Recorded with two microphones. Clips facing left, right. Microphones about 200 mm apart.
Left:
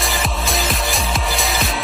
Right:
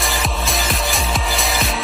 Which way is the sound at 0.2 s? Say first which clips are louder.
Left 1 dB; centre (ahead or behind).